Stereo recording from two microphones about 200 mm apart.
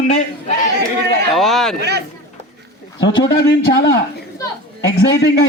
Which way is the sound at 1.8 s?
55° right (ahead or behind).